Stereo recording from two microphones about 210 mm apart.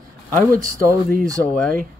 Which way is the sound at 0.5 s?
40° right (ahead or behind).